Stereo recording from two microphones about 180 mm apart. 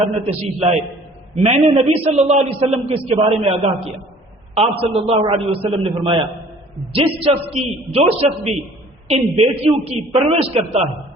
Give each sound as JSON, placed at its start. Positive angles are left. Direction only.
{"t": 0.0, "sound": "a man's voice", "side_deg": -35}